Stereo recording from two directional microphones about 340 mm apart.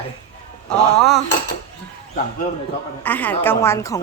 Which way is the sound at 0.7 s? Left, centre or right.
Centre.